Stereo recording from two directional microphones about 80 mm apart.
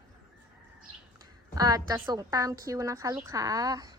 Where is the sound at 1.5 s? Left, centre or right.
Right.